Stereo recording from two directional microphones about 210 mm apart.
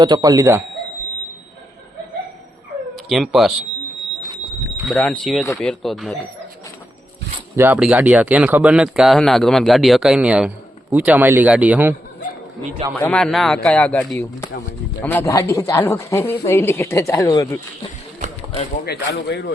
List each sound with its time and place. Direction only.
0.0 s a man's voice: 15° right (ahead or behind)
3.1 s speech: centre (ahead or behind)
4.9 s speech: 5° left (ahead or behind)
7.5 s a man's voice: 10° right (ahead or behind)
13.0 s speech: 5° left (ahead or behind)
18.2 s a sound: 35° right (ahead or behind)
18.9 s speech: 50° left (ahead or behind)